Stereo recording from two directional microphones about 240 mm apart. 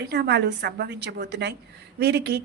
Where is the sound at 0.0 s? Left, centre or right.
Right.